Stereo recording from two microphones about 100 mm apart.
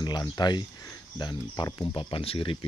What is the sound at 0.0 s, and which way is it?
Speech, 45° left (ahead or behind).